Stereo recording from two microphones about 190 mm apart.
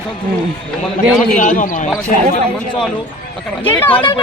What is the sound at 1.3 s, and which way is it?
Speech, 40° left (ahead or behind).